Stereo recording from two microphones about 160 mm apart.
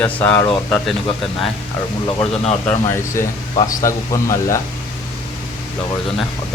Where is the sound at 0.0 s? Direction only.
10° left (ahead or behind).